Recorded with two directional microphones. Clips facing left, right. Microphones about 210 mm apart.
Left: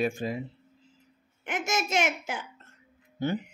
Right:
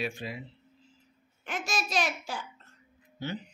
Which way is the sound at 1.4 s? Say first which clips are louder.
Left 4 dB; 20° left (ahead or behind).